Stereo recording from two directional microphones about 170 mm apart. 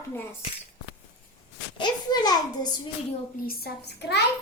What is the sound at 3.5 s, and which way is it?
Speech, 65° left (ahead or behind).